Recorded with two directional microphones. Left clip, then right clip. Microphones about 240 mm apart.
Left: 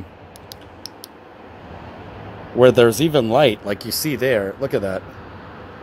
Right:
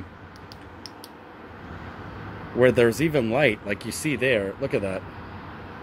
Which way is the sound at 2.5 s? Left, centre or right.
Centre.